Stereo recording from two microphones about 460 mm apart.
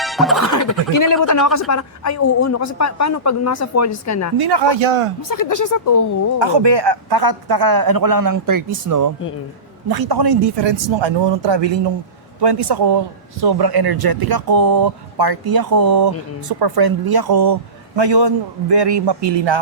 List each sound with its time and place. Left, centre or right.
0.0 s music: centre
0.4 s speech: left
4.4 s speech: right
5.3 s speech: left
6.4 s speech: right